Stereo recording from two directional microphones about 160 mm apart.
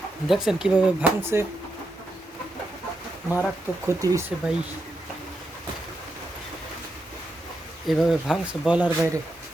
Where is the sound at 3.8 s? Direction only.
20° right (ahead or behind).